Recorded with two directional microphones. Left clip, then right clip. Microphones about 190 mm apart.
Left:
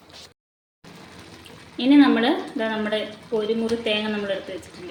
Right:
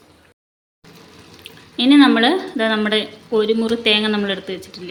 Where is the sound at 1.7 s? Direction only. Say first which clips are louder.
Right 4 dB; 55° right (ahead or behind).